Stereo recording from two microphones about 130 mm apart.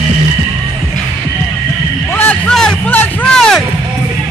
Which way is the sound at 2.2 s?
10° left (ahead or behind).